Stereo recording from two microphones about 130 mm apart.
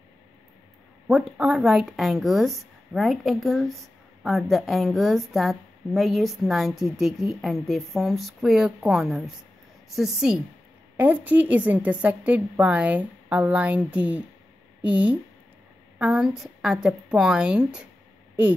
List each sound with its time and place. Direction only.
1.0 s a woman's voice: 5° right (ahead or behind)